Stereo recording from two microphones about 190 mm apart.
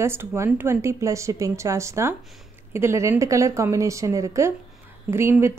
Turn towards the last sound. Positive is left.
turn(degrees=-15)  # may be behind; listen again after turning